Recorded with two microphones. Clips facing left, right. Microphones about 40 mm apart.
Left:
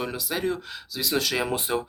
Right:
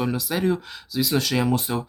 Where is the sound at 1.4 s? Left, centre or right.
Centre.